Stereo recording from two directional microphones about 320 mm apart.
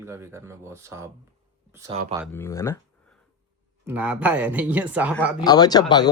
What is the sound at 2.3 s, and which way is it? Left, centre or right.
Speech, centre.